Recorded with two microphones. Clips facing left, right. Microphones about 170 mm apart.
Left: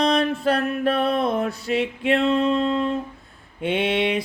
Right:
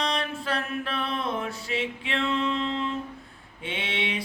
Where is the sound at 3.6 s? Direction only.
50° left (ahead or behind).